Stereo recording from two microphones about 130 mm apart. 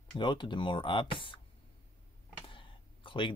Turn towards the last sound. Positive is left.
turn(degrees=40)  # may be behind; listen again after turning